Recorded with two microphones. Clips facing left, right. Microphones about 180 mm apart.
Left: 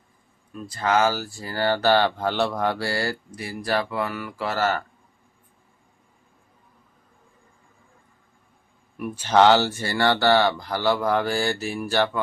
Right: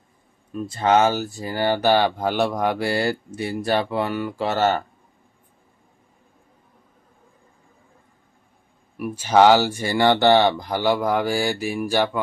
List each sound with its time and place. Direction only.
0.5 s speech: 25° right (ahead or behind)
9.0 s speech: 10° right (ahead or behind)